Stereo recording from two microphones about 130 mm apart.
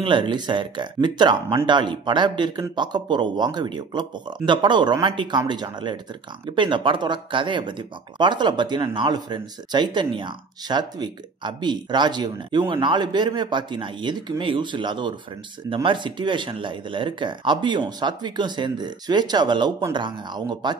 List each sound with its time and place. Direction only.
0.0 s speech: 40° right (ahead or behind)